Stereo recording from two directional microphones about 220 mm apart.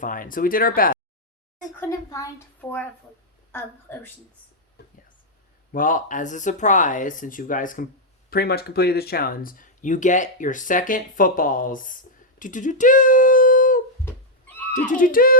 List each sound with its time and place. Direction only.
0.0 s speech: 40° left (ahead or behind)
1.8 s a woman's voice: 15° left (ahead or behind)
5.7 s speech: 40° left (ahead or behind)
14.1 s cat: 10° left (ahead or behind)
14.7 s speech: 35° left (ahead or behind)